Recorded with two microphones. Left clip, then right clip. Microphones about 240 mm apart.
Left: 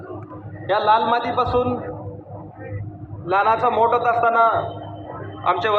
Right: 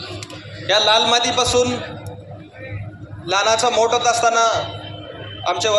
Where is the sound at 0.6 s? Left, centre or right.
Right.